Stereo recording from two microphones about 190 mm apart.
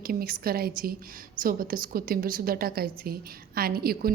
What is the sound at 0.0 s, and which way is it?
A woman's voice, 50° right (ahead or behind).